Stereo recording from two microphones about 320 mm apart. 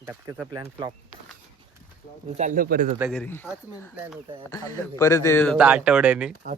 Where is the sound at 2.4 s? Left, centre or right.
Right.